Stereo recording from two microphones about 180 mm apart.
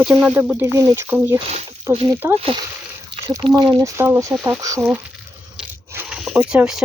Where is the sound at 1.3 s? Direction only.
35° right (ahead or behind).